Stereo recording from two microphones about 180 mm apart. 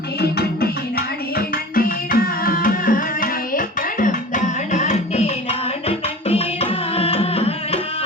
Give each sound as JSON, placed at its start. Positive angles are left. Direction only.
{"t": 0.2, "sound": "music", "side_deg": 60}